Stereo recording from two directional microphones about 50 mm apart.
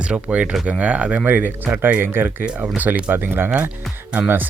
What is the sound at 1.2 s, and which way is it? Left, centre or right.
Speech, right.